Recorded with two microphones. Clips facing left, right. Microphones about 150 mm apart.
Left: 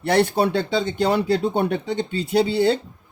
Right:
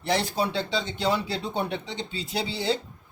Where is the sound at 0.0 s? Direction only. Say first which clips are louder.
Left 7 dB; 60° left (ahead or behind).